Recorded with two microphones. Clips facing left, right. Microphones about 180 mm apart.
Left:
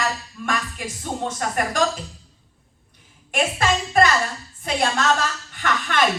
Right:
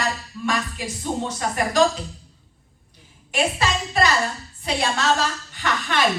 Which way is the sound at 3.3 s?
50° left (ahead or behind).